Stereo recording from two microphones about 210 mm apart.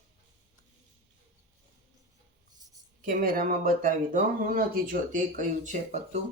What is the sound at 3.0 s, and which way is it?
Speech, 40° right (ahead or behind).